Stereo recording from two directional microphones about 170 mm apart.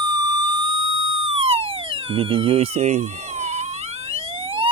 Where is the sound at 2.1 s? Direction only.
30° right (ahead or behind).